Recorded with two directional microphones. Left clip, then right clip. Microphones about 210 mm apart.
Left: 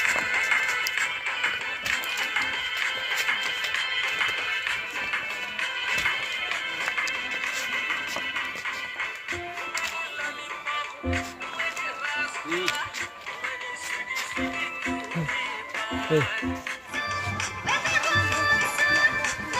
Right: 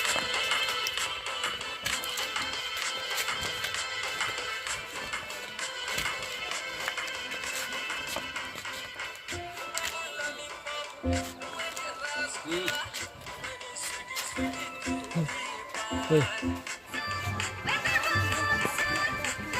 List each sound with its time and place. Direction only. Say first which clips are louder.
0.0 s music: left 5 dB; 65° right (ahead or behind)
10.7 s music: left 4 dB; 60° right (ahead or behind)
14.3 s music: left 5 dB; 55° right (ahead or behind)
16.9 s music: left 4 dB; 30° left (ahead or behind)